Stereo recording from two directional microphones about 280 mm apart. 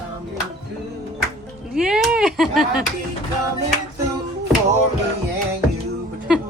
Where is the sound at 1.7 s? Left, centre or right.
Centre.